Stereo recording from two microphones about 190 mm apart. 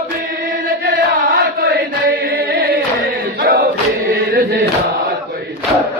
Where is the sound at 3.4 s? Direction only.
55° right (ahead or behind).